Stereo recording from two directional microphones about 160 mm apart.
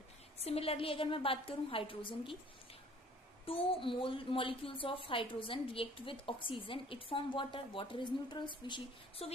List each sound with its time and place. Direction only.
0.4 s a woman's voice: 40° left (ahead or behind)
3.4 s a woman's voice: 35° left (ahead or behind)